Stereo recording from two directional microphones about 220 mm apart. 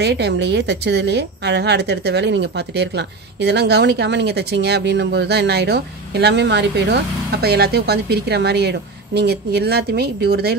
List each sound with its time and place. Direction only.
0.0 s a woman's voice: 50° right (ahead or behind)